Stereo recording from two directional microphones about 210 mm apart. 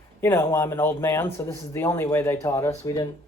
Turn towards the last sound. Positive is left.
turn(degrees=15)  # may be behind; listen again after turning